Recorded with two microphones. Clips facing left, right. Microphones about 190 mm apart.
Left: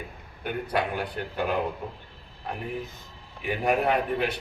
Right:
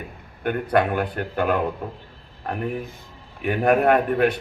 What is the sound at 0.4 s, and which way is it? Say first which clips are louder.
A man's voice: right 7 dB; 55° right (ahead or behind).